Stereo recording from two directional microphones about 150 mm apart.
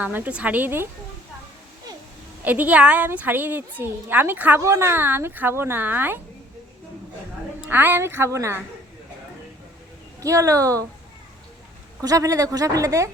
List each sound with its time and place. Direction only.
0.0 s a woman's voice: 10° right (ahead or behind)
2.4 s a woman's voice: 10° right (ahead or behind)
7.7 s a woman's voice: 15° right (ahead or behind)
10.2 s speech: 20° right (ahead or behind)
12.0 s speech: 20° right (ahead or behind)